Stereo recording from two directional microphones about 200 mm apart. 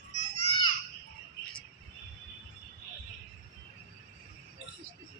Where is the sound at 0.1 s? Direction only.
35° left (ahead or behind).